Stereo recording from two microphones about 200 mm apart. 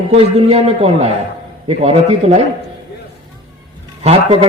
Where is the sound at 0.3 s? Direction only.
30° right (ahead or behind).